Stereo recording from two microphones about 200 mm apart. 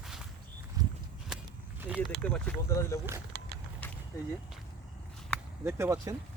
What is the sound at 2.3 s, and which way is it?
Speech, 10° left (ahead or behind).